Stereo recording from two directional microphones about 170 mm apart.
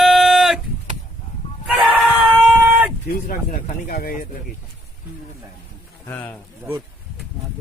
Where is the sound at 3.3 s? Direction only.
55° left (ahead or behind).